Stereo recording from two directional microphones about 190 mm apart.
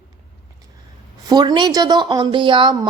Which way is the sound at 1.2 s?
20° right (ahead or behind).